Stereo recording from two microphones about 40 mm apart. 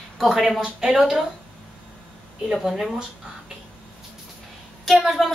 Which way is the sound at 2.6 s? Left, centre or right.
Centre.